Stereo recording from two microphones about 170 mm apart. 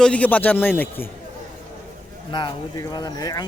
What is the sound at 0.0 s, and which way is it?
Speech, 10° left (ahead or behind).